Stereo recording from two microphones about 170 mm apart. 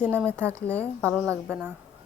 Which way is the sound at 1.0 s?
15° right (ahead or behind).